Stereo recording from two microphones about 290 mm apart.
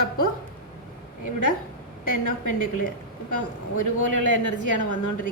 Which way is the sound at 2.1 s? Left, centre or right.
Left.